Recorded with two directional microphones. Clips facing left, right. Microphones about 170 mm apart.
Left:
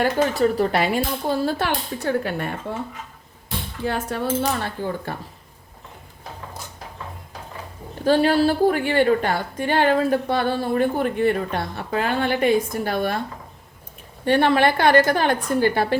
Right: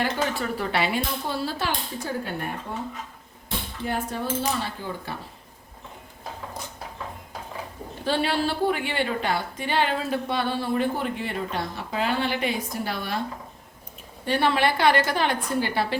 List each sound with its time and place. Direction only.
0.0 s a woman's voice: 40° left (ahead or behind); by 2.8 s 90° left
3.8 s speech: 80° left; by 5.1 s 55° left (ahead or behind)
8.0 s a woman's voice: 45° left (ahead or behind)
14.3 s a woman's voice: 55° left (ahead or behind)